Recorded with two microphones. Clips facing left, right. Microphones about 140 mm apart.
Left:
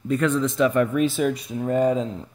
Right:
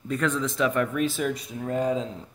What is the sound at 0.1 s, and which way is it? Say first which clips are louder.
Speech: left 5 dB; 5° left (ahead or behind).